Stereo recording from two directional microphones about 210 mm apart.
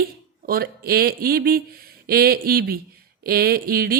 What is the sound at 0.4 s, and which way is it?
A woman's voice, 45° right (ahead or behind).